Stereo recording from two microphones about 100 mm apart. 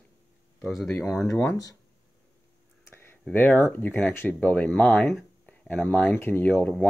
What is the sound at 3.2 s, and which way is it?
Speech, 20° left (ahead or behind).